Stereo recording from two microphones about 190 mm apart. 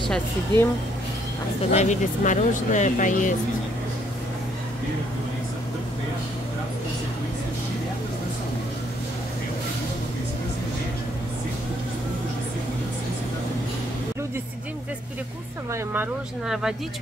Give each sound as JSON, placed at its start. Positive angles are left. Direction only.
{"t": 0.5, "sound": "speech", "side_deg": -25}
{"t": 1.6, "sound": "speech", "side_deg": 35}
{"t": 15.7, "sound": "speech", "side_deg": -10}